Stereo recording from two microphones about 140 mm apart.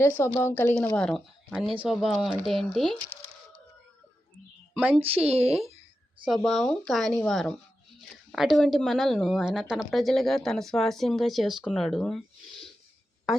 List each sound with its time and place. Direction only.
0.2 s a woman's voice: 15° left (ahead or behind)
4.7 s a woman's voice: 10° right (ahead or behind)
4.9 s speech: 45° right (ahead or behind)
6.2 s speech: centre (ahead or behind)